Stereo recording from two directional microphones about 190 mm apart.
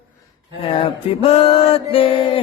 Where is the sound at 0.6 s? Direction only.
30° left (ahead or behind).